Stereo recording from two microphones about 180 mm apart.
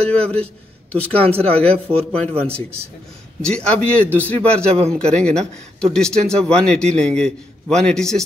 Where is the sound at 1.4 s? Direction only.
5° left (ahead or behind).